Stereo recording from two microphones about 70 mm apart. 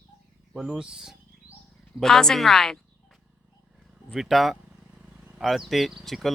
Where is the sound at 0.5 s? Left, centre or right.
Centre.